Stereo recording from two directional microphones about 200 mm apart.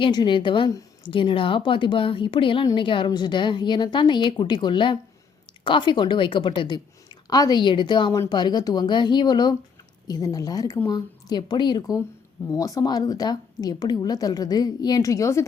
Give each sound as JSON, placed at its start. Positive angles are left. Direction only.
{"t": 0.0, "sound": "speech", "side_deg": 20}